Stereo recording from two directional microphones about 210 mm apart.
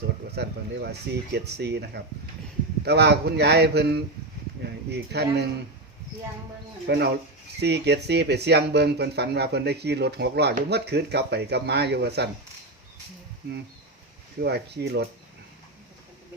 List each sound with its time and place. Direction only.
0.3 s speech: 50° right (ahead or behind)
6.8 s speech: 50° right (ahead or behind)
14.4 s speech: 50° right (ahead or behind)